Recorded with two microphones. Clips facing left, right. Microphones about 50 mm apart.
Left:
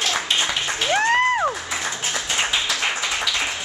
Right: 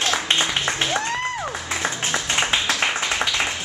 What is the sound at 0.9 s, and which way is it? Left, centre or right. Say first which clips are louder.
Music: left 6 dB; left.